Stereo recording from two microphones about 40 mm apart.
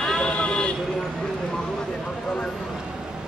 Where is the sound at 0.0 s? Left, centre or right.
Centre.